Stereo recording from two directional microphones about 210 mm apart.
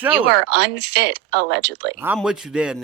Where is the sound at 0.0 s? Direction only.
10° right (ahead or behind).